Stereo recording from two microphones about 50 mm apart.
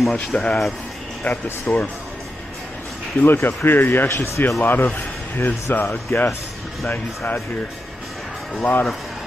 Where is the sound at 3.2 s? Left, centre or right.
Left.